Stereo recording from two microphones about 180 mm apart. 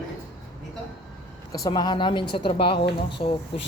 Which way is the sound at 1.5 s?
20° left (ahead or behind).